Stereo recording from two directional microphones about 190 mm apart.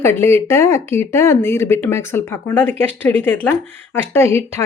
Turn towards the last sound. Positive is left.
turn(degrees=15)  # may be behind; listen again after turning